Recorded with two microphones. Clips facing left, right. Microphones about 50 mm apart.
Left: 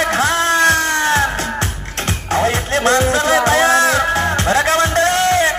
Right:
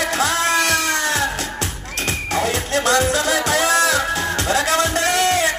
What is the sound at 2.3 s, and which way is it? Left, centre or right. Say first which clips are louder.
Music: left 5 dB; left.